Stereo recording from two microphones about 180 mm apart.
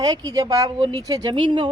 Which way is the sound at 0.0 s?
20° right (ahead or behind).